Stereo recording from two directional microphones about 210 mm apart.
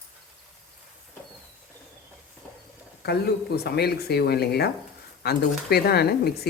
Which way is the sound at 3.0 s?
50° left (ahead or behind).